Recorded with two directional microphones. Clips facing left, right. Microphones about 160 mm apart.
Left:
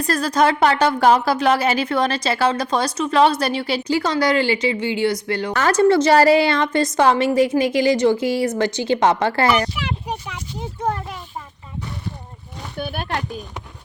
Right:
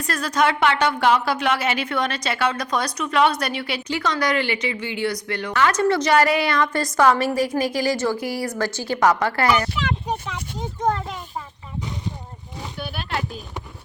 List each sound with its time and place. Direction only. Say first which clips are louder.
0.0 s speech: left 4 dB; 35° left (ahead or behind)
9.7 s speech: right 1 dB; 10° left (ahead or behind)
12.8 s speech: left 3 dB; 50° left (ahead or behind)